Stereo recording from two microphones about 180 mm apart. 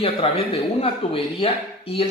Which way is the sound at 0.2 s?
30° left (ahead or behind).